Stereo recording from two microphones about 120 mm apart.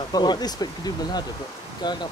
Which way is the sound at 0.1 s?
35° left (ahead or behind).